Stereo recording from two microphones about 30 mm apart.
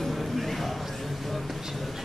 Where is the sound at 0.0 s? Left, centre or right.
Centre.